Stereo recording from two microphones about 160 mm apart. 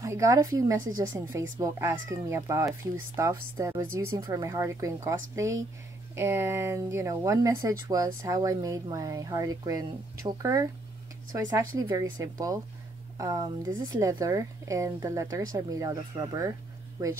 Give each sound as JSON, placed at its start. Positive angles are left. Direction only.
{"t": 0.0, "sound": "speech", "side_deg": -20}
{"t": 11.9, "sound": "speech", "side_deg": -20}